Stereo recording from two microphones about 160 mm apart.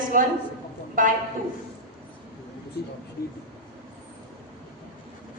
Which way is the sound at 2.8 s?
85° left.